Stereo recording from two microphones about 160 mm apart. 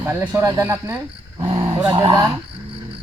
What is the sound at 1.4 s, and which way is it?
Dog, 30° right (ahead or behind).